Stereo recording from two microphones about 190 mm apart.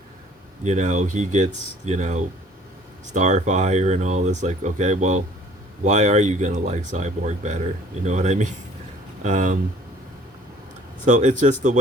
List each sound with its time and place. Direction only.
0.6 s speech: 40° right (ahead or behind)
11.0 s speech: 40° right (ahead or behind)